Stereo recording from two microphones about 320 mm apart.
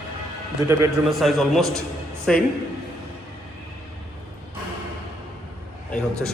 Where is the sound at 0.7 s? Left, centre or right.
Centre.